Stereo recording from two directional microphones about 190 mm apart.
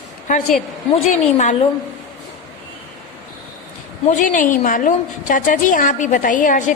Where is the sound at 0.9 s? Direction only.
40° left (ahead or behind).